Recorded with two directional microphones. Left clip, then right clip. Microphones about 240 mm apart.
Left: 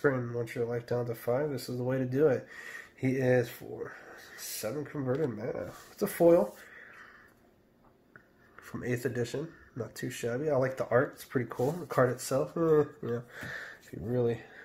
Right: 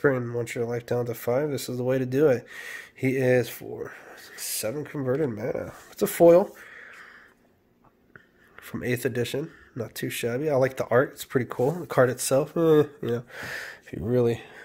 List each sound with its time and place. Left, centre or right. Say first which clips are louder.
0.0 s speech: right 6 dB; right
8.6 s speech: right 6 dB; right